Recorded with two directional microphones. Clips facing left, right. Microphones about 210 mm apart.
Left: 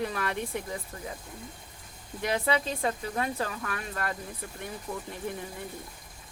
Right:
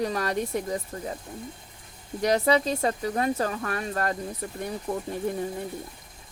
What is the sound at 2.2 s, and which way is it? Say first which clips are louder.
Speech: right 6 dB; 40° right (ahead or behind).